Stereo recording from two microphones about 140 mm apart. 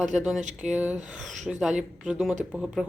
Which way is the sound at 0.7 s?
10° right (ahead or behind).